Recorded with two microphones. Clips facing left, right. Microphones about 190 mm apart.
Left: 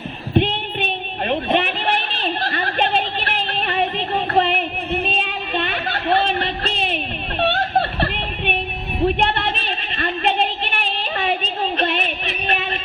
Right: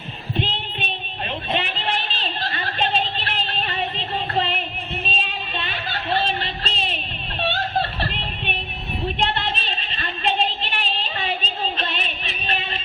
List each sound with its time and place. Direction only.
0.3 s child singing: 60° left (ahead or behind)
9.0 s a sound: 60° left (ahead or behind)
11.8 s music: 60° left (ahead or behind)